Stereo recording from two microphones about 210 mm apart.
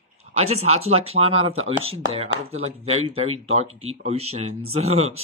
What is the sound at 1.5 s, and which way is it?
Speech, 70° right (ahead or behind).